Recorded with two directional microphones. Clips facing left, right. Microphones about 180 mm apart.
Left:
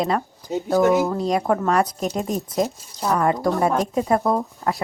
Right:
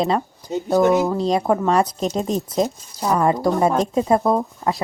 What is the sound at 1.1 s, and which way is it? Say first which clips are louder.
Speech: right 2 dB; 25° right (ahead or behind).